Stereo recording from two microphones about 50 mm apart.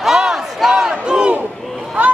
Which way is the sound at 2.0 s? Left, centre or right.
Right.